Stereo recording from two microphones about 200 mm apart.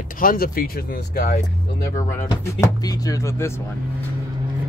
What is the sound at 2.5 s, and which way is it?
Speech, 20° left (ahead or behind).